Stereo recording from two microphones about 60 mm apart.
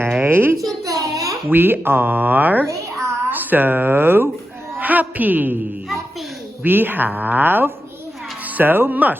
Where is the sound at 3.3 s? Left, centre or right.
Right.